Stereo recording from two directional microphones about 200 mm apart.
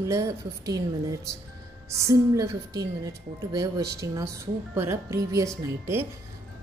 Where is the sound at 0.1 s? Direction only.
15° right (ahead or behind).